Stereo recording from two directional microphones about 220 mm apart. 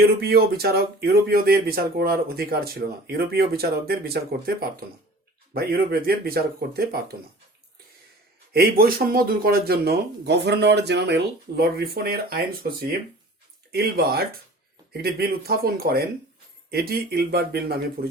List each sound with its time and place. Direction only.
0.2 s speech: 45° right (ahead or behind)
5.5 s speech: 45° right (ahead or behind)
8.5 s speech: 45° right (ahead or behind)